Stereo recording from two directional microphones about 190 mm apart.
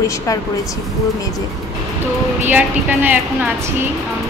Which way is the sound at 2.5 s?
10° right (ahead or behind).